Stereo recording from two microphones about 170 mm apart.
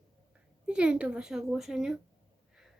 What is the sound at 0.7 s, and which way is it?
Speech, 5° right (ahead or behind).